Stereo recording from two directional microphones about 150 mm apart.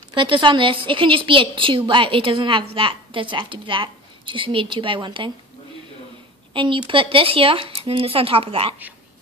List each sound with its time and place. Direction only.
0.1 s a woman's voice: 35° right (ahead or behind)
6.5 s a woman's voice: 35° right (ahead or behind)